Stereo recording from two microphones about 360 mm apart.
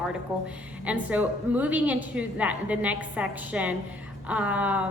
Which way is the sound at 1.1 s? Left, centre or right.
Centre.